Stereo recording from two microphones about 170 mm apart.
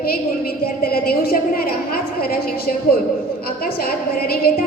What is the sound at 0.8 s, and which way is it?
A woman's voice, 60° left (ahead or behind).